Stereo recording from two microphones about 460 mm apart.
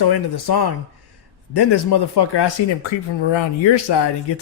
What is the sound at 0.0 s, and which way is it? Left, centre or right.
Speech, left.